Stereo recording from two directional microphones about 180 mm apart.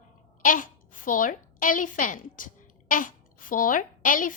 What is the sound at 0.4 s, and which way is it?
A woman's voice, 50° left (ahead or behind).